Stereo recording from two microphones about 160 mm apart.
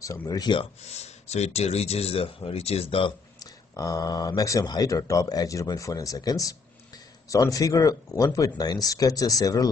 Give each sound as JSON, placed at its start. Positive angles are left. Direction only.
{"t": 0.0, "sound": "speech", "side_deg": 20}
{"t": 0.8, "sound": "speech", "side_deg": 45}
{"t": 3.3, "sound": "speech", "side_deg": 20}